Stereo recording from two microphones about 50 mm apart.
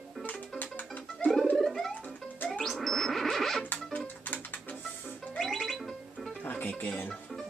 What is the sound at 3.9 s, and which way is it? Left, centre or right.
Music, left.